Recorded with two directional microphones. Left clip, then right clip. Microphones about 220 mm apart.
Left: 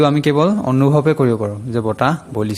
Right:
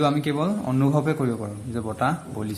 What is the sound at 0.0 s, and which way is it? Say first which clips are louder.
Speech: left 9 dB; 40° left (ahead or behind).